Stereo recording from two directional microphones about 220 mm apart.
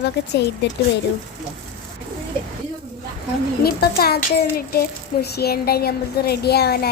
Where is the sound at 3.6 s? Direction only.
45° left (ahead or behind).